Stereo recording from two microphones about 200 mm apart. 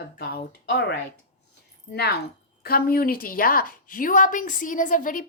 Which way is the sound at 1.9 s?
55° left (ahead or behind).